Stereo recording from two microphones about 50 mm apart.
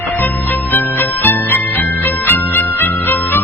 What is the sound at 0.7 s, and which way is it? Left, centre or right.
Music, left.